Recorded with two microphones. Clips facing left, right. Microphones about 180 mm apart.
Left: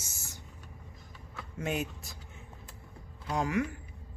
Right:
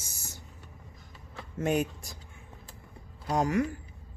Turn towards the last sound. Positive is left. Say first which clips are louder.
# right 4 dB
turn(degrees=-40)  # may be behind; listen again after turning